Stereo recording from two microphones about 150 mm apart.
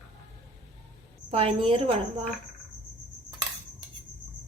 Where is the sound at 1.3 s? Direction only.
40° right (ahead or behind).